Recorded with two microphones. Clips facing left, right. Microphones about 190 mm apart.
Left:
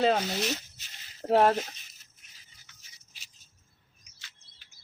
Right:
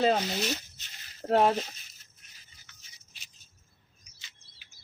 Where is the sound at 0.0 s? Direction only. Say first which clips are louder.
Even; centre (ahead or behind).